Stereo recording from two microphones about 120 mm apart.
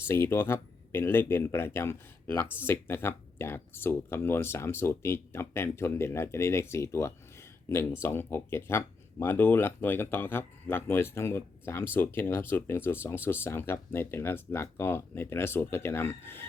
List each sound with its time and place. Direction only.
0.1 s speech: 20° left (ahead or behind)